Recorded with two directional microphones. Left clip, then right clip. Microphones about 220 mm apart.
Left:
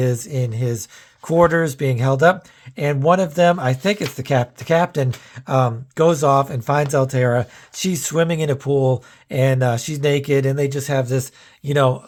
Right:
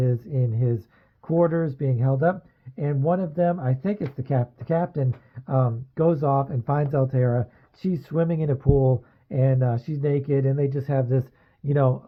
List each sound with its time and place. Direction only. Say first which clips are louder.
0.0 s speech: left 6 dB; 15° left (ahead or behind)
1.2 s speech: left 7 dB; 20° left (ahead or behind)